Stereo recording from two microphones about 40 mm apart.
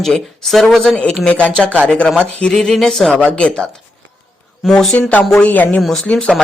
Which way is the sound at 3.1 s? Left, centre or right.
Left.